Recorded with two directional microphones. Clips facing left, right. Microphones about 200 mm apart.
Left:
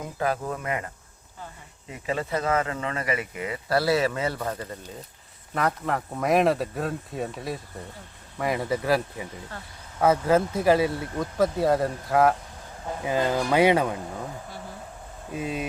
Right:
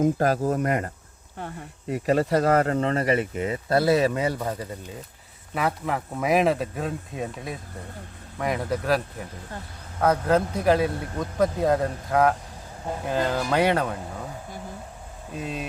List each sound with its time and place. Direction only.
0.0 s speech: 45° right (ahead or behind)
1.4 s speech: 65° right (ahead or behind)
2.0 s speech: 40° right (ahead or behind); by 14.0 s 10° left (ahead or behind)
15.3 s speech: 5° left (ahead or behind)